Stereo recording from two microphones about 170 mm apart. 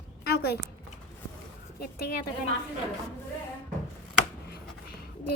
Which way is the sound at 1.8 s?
65° left (ahead or behind).